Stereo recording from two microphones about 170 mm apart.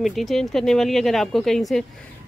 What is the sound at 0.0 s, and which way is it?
Speech, centre (ahead or behind).